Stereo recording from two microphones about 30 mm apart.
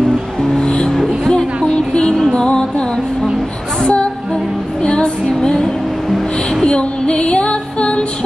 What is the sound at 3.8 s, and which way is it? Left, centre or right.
Music, left.